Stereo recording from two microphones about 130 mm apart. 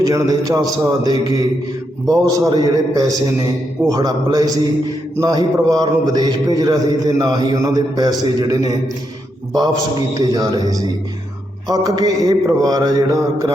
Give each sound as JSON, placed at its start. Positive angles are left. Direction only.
{"t": 0.0, "sound": "mantra", "side_deg": -25}
{"t": 5.1, "sound": "a man's voice", "side_deg": -30}
{"t": 9.6, "sound": "mantra", "side_deg": -30}